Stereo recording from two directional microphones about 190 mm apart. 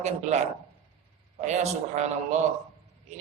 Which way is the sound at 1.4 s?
35° right (ahead or behind).